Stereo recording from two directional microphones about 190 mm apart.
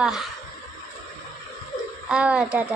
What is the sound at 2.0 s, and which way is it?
Speech, 5° right (ahead or behind).